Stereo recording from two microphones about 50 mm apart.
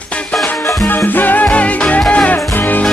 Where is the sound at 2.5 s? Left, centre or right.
Left.